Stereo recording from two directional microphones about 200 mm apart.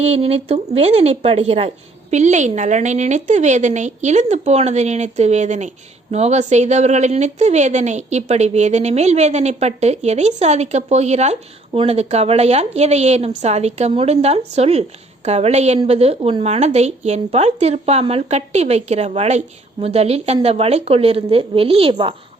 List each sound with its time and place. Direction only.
0.0 s a woman's voice: 30° right (ahead or behind)